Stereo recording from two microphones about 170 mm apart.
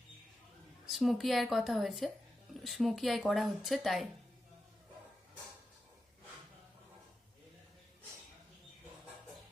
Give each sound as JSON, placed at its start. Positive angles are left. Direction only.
{"t": 0.9, "sound": "speech", "side_deg": 0}